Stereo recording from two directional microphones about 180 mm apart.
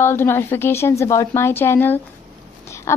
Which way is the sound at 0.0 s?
15° left (ahead or behind).